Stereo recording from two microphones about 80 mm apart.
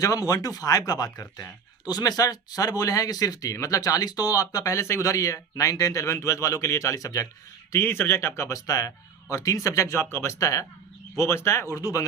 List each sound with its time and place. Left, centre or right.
0.0 s speech: left
7.7 s speech: left